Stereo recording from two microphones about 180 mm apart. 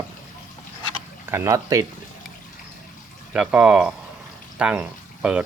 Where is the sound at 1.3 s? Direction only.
15° right (ahead or behind).